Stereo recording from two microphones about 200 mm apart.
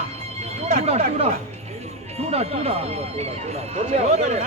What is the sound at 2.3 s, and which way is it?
Speech, 30° right (ahead or behind).